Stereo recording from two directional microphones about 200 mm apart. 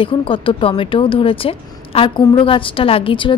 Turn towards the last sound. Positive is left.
turn(degrees=25)  # may be behind; listen again after turning